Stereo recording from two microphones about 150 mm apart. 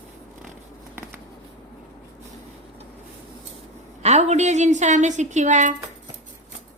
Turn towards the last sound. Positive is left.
turn(degrees=-55)  # may be behind; listen again after turning